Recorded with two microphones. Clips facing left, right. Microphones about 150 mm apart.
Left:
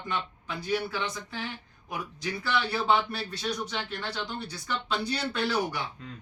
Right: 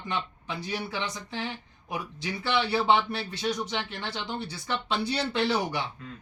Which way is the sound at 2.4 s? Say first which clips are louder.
Right 3 dB; 25° right (ahead or behind).